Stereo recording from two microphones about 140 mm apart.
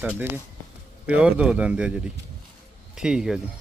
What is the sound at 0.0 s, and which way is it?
Speech, 15° right (ahead or behind).